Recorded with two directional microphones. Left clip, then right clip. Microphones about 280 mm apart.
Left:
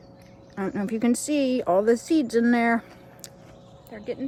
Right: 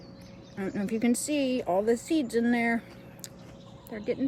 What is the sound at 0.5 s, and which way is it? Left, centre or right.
Speech, centre.